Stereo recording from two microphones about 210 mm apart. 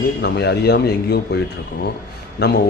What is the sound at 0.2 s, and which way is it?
A man's voice, 50° left (ahead or behind).